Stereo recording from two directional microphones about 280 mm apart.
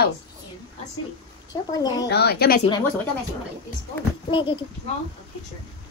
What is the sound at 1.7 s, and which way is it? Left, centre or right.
Speech, centre.